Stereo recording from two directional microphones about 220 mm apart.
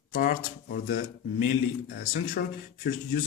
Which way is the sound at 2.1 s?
40° left (ahead or behind).